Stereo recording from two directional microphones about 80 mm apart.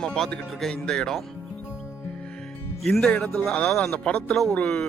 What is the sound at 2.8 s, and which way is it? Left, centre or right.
Speech, centre.